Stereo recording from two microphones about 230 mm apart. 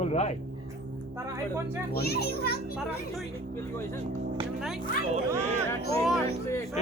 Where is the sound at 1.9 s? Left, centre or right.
Left.